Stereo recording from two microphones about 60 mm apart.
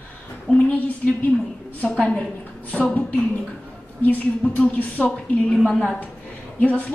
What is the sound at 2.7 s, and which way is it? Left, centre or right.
A woman's voice, left.